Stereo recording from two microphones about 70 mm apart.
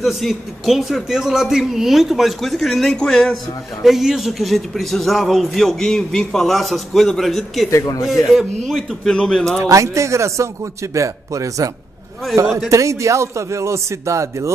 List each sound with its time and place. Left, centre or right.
0.0 s a man's voice: centre
3.8 s a man's voice: centre
9.6 s a man's voice: right